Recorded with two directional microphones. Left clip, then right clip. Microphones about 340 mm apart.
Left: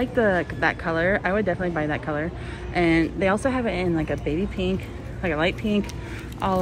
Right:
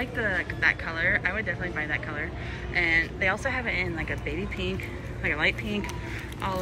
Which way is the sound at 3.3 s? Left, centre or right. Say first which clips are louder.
Left 5 dB; left.